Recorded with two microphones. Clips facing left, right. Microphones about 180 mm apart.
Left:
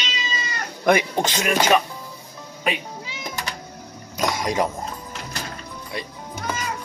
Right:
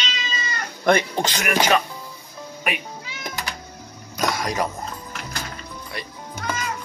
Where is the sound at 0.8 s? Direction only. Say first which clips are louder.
Even; 15° left (ahead or behind).